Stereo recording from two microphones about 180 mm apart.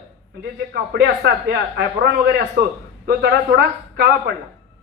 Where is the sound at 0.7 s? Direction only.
60° right (ahead or behind).